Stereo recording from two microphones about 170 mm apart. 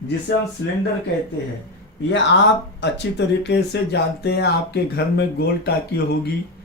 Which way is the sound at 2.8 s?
90° left.